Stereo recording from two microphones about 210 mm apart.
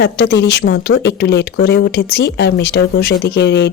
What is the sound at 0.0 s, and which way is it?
Speech, 55° left (ahead or behind).